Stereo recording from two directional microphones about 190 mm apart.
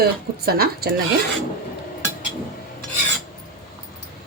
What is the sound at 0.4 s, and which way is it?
Speech, 55° right (ahead or behind).